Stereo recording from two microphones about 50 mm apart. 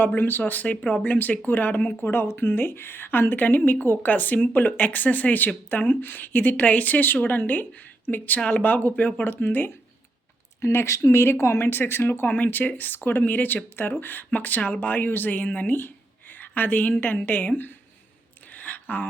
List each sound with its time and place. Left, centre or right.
0.0 s speech: left
10.8 s speech: left
18.5 s a sound: left